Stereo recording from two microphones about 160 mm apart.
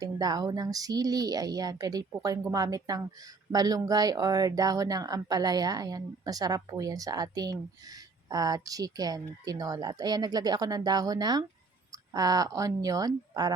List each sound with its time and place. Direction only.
0.0 s speech: 25° right (ahead or behind)